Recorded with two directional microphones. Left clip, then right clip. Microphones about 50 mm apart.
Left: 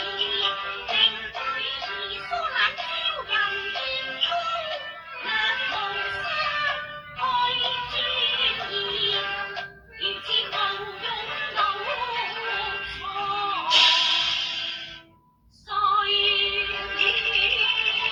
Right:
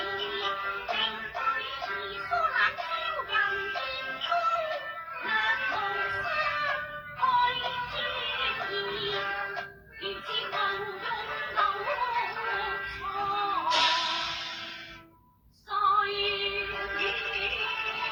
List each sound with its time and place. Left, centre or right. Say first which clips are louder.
0.0 s music: left 6 dB; right
15.7 s music: left 4 dB; right